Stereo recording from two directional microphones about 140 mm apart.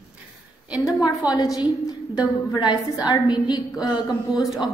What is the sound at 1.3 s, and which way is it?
A woman's voice, 25° left (ahead or behind).